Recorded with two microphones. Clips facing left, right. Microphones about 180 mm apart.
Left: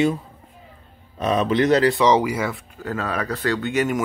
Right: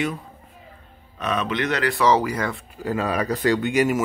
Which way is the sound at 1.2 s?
35° left (ahead or behind).